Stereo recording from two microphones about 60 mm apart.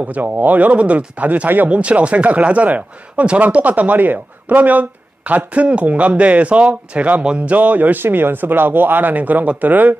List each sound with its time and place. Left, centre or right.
0.0 s speech: right